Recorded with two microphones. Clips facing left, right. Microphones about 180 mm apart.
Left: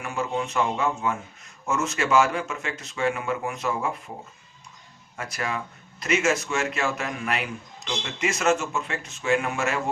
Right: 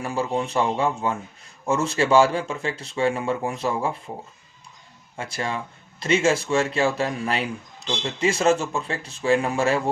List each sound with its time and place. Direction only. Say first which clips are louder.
0.0 s speech: right 3 dB; 35° right (ahead or behind)
5.1 s speech: right 2 dB; 30° right (ahead or behind)